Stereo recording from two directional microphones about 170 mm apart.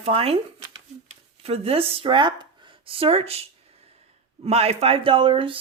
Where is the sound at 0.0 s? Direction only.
35° right (ahead or behind).